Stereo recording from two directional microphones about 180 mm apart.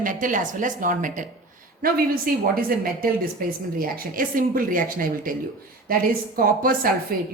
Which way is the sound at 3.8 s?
50° right (ahead or behind).